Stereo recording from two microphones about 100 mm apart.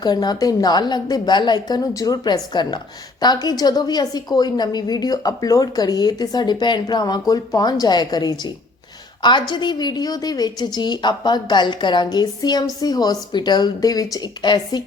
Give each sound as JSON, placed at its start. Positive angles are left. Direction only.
{"t": 0.0, "sound": "a woman's voice", "side_deg": 45}